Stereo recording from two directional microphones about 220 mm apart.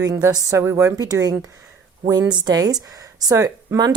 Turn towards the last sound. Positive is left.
turn(degrees=-15)  # may be behind; listen again after turning